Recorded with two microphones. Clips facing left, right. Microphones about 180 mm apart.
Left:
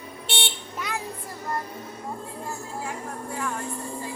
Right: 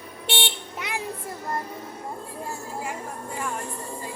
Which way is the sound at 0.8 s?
20° right (ahead or behind).